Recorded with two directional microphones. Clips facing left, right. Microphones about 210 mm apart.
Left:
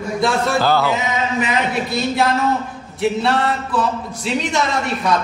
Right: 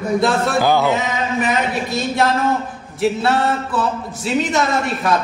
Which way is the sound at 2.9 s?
5° right (ahead or behind).